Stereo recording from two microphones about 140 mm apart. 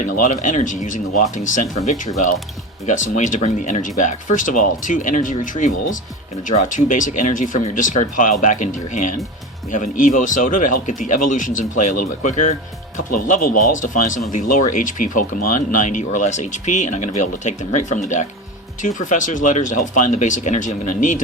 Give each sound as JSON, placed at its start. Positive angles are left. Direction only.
{"t": 0.0, "sound": "speech", "side_deg": 65}